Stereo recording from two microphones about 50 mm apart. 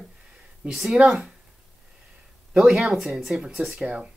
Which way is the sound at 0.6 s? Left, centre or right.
Centre.